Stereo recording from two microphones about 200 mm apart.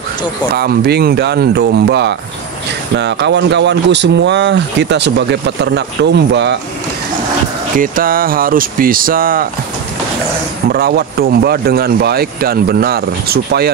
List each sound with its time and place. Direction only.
0.6 s speech: 55° right (ahead or behind)
7.7 s speech: 45° right (ahead or behind)
10.7 s speech: 50° right (ahead or behind)